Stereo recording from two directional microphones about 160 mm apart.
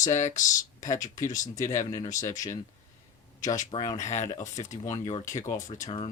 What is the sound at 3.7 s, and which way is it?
Speech, 30° left (ahead or behind).